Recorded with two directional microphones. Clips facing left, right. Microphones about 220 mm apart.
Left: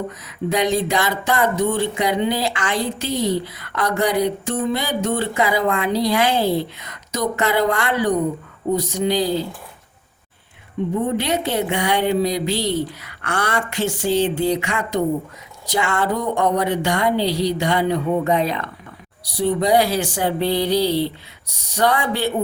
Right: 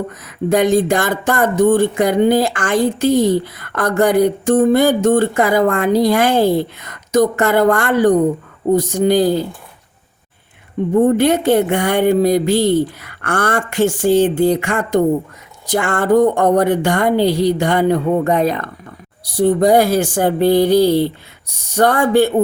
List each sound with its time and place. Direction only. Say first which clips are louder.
0.3 s speech: right 6 dB; 50° right (ahead or behind)
10.9 s speech: right 10 dB; 50° right (ahead or behind)